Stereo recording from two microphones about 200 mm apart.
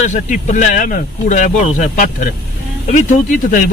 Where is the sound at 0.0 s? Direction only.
35° left (ahead or behind).